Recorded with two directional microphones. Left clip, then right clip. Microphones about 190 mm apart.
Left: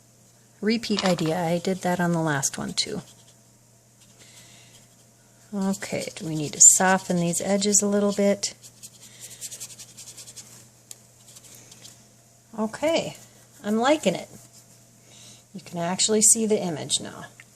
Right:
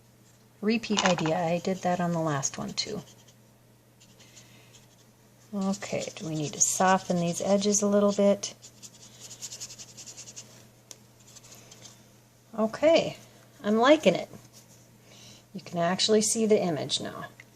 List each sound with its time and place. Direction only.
0.6 s speech: 35° left (ahead or behind)
5.8 s speech: 30° left (ahead or behind)
12.5 s a woman's voice: 10° left (ahead or behind)